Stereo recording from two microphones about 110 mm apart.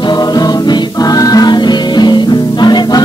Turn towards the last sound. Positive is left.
turn(degrees=40)  # may be behind; listen again after turning